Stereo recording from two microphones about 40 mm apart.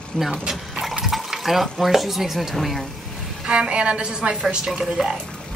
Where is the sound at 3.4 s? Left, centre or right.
Right.